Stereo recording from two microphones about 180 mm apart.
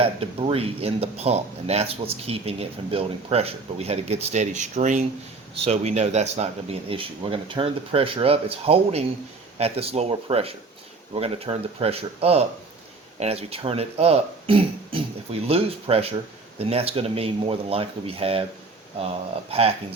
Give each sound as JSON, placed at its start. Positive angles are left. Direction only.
{"t": 0.0, "sound": "speech", "side_deg": -30}
{"t": 19.5, "sound": "speech", "side_deg": -30}